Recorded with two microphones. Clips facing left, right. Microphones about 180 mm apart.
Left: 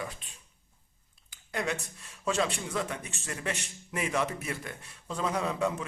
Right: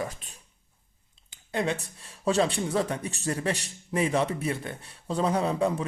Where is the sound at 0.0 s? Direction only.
40° right (ahead or behind).